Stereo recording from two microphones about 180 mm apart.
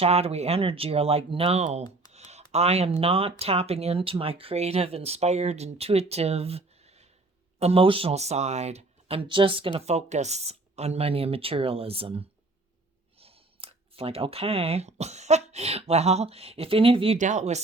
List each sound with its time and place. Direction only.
0.0 s speech: 35° right (ahead or behind)
2.1 s a sound: 35° right (ahead or behind)
3.0 s speech: 30° right (ahead or behind)
17.2 s speech: 40° right (ahead or behind)